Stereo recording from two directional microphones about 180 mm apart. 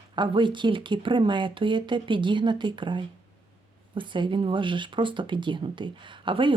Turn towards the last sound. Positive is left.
turn(degrees=-30)  # may be behind; listen again after turning